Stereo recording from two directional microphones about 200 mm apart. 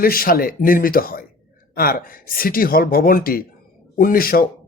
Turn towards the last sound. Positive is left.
turn(degrees=45)  # may be behind; listen again after turning